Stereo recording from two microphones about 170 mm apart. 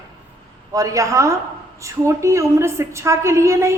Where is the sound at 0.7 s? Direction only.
20° right (ahead or behind).